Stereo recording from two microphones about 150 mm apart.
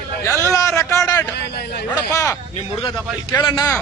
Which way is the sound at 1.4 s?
90° left.